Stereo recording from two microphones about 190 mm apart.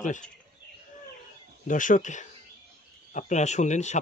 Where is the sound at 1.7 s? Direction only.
45° left (ahead or behind).